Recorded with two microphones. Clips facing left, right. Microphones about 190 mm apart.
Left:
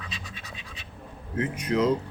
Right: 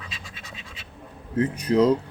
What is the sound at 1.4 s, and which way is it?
Speech, 35° right (ahead or behind).